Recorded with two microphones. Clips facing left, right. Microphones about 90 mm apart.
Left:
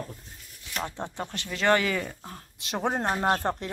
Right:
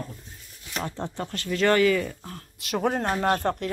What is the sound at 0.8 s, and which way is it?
Speech, 15° left (ahead or behind).